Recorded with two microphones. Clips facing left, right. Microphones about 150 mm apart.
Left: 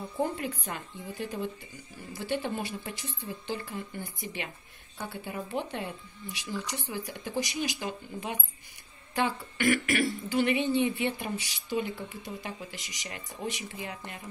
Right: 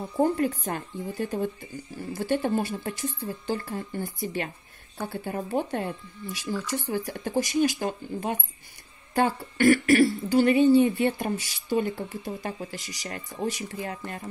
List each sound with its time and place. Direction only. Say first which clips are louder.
0.2 s speech: right 8 dB; 40° right (ahead or behind)